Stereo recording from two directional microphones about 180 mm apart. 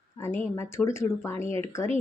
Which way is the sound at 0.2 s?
15° left (ahead or behind).